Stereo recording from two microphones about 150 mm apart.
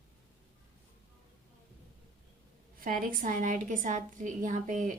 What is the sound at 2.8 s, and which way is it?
A woman's voice, 65° right (ahead or behind).